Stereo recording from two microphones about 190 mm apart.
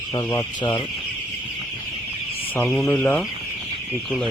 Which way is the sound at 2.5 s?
10° left (ahead or behind).